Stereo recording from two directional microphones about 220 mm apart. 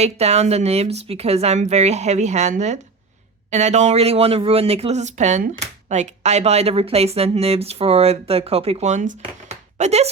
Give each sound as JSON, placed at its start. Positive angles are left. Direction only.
{"t": 0.0, "sound": "speech", "side_deg": -30}